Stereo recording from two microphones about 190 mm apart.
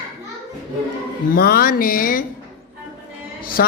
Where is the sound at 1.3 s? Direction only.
55° left (ahead or behind).